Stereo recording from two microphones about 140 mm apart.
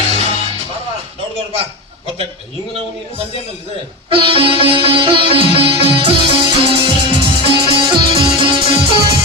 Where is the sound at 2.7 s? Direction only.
45° right (ahead or behind).